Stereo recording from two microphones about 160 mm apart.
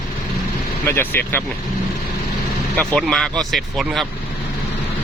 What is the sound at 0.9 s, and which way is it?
Speech, 15° left (ahead or behind).